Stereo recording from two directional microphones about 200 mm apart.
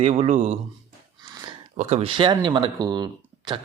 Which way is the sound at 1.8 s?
30° right (ahead or behind).